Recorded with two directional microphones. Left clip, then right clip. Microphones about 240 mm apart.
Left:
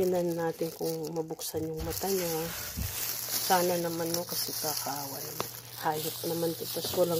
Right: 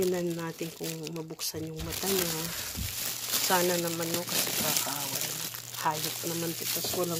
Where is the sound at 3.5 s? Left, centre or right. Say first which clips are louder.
Left 1 dB; right.